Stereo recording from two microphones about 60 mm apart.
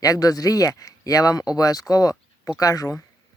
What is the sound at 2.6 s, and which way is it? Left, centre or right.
Speech, left.